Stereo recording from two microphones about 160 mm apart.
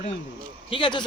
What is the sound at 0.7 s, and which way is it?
Speech, 30° left (ahead or behind).